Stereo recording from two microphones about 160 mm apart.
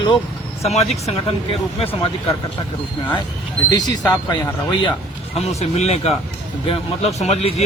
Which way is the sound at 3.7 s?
25° left (ahead or behind).